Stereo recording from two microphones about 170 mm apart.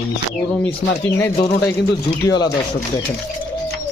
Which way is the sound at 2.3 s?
25° left (ahead or behind).